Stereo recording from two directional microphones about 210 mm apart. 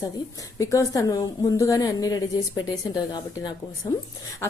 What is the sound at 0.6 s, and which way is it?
A woman's voice, 15° left (ahead or behind).